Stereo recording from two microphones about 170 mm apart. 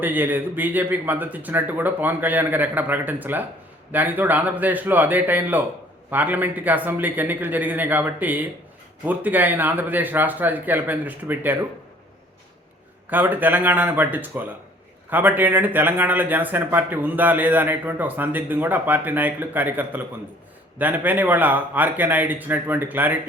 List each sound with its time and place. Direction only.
0.0 s speech: 10° right (ahead or behind)
13.1 s speech: 10° right (ahead or behind)